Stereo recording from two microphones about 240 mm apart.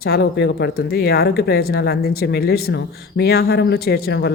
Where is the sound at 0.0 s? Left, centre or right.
Left.